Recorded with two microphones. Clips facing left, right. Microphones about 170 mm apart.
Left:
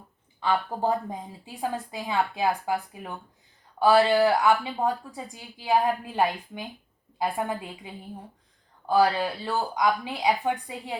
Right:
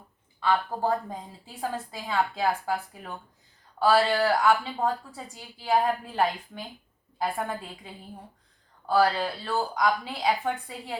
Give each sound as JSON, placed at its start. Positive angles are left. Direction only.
{"t": 0.3, "sound": "a woman's voice", "side_deg": 15}
{"t": 8.9, "sound": "speech", "side_deg": 15}